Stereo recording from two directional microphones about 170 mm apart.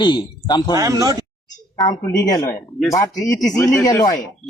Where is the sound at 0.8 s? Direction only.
20° right (ahead or behind).